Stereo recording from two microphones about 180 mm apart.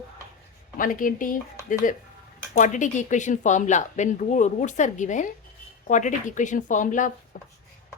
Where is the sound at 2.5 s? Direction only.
45° left (ahead or behind).